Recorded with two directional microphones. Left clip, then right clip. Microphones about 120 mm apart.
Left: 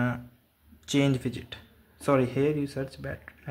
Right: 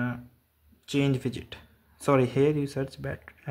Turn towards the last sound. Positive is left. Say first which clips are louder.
# right 1 dB
turn(degrees=-25)  # may be behind; listen again after turning